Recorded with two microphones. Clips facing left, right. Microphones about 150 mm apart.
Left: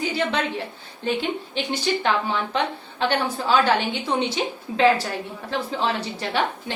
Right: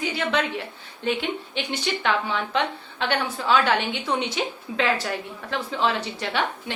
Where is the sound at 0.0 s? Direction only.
35° left (ahead or behind).